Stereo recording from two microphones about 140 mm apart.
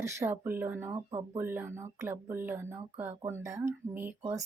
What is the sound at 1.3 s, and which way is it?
A woman's voice, 15° right (ahead or behind).